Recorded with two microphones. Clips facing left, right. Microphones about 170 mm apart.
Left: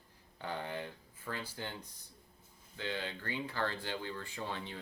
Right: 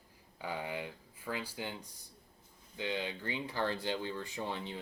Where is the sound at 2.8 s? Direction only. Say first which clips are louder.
Right 3 dB; 15° right (ahead or behind).